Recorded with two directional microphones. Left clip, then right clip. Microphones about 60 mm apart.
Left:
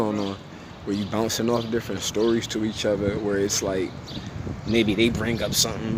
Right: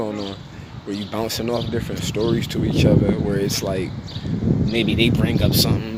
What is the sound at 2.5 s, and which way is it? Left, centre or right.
Speech, left.